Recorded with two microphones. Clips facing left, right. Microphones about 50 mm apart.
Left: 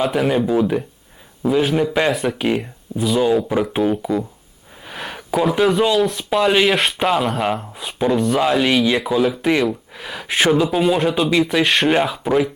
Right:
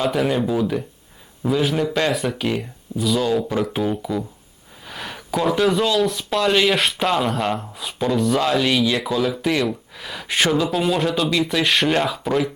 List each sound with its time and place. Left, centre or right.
0.0 s speech: centre
0.6 s speech: centre
4.8 s a sound: centre
6.1 s speech: centre